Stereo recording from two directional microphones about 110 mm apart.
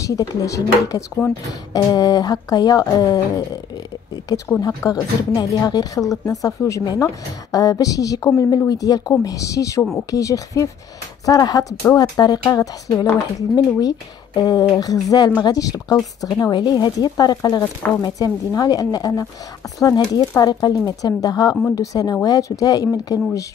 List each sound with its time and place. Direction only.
0.0 s a woman's voice: 30° left (ahead or behind)